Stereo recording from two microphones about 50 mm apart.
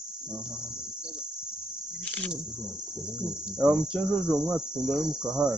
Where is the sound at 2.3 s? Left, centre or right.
Centre.